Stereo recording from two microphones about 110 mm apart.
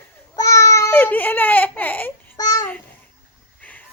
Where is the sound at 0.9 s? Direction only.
15° left (ahead or behind).